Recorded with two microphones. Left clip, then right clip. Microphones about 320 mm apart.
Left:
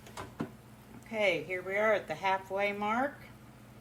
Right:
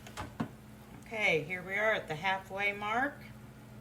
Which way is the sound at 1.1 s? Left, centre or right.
Centre.